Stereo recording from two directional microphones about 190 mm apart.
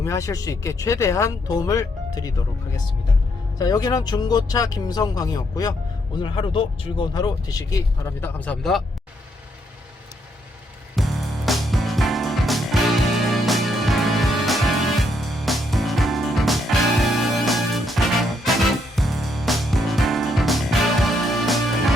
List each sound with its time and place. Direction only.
0.0 s speech: 15° left (ahead or behind)
3.6 s speech: 20° left (ahead or behind); by 8.8 s 5° left (ahead or behind)
10.9 s music: centre (ahead or behind)